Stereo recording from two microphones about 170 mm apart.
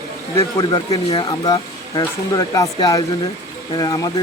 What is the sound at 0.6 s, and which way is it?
Speech, 35° left (ahead or behind).